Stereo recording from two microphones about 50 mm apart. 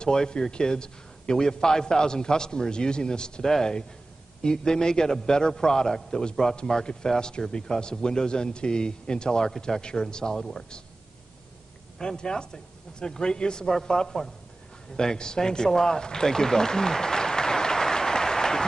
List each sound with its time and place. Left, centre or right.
0.0 s a man's voice: centre
12.0 s a man's voice: centre